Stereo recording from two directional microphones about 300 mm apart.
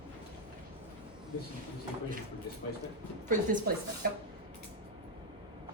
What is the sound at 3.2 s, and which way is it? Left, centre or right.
Speech, right.